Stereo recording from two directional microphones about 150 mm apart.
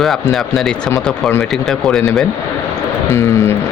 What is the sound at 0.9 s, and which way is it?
Speech, 20° left (ahead or behind).